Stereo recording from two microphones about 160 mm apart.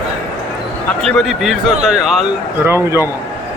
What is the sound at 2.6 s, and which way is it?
Speech, 15° right (ahead or behind).